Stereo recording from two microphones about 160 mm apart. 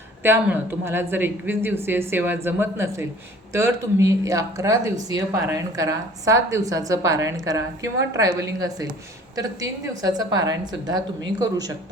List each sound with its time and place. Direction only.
0.2 s a woman's voice: 15° right (ahead or behind)